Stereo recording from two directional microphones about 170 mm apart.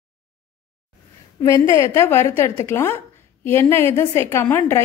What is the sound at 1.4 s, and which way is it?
A woman's voice, 20° left (ahead or behind).